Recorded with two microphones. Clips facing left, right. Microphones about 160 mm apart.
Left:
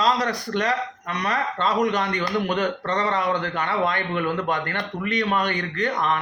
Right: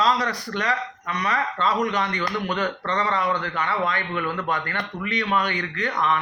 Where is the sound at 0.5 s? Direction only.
45° left (ahead or behind).